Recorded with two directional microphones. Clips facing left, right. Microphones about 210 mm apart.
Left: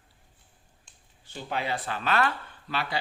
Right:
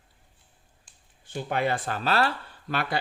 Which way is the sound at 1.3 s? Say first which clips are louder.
Right 5 dB; 55° right (ahead or behind).